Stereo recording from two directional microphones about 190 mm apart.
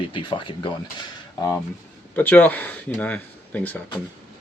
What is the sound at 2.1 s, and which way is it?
Speech, 10° left (ahead or behind).